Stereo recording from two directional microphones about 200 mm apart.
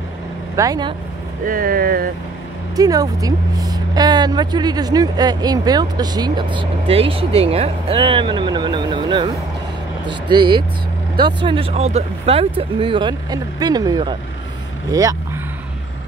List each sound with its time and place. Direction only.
0.6 s speech: 20° right (ahead or behind)
1.4 s speech: 45° right (ahead or behind)
2.7 s speech: 20° right (ahead or behind)